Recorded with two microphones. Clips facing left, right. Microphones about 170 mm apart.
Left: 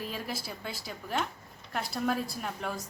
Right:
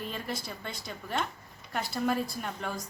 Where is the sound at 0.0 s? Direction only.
5° left (ahead or behind).